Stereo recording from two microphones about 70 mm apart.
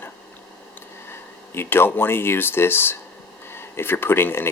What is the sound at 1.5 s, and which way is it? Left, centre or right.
Speech, left.